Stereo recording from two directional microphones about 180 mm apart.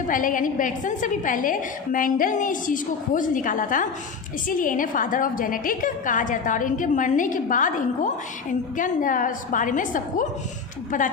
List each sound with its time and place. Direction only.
0.1 s a woman's voice: 50° left (ahead or behind)